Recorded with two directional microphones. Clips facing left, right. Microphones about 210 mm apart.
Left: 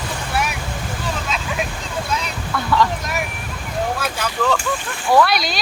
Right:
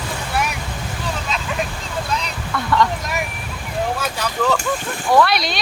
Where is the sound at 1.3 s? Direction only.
Centre (ahead or behind).